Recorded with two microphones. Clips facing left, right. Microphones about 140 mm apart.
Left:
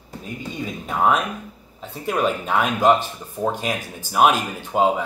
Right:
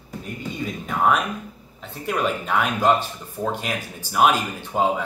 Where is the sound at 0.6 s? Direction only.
20° left (ahead or behind).